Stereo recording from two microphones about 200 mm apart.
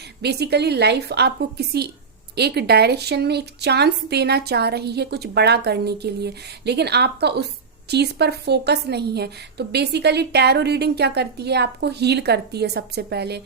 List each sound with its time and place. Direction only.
0.2 s a woman's voice: 55° right (ahead or behind)